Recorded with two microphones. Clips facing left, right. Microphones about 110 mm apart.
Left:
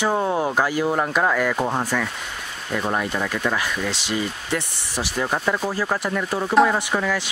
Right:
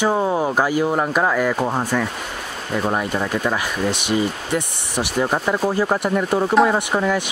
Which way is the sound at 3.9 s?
55° right (ahead or behind).